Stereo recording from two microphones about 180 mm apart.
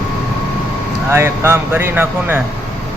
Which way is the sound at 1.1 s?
15° right (ahead or behind).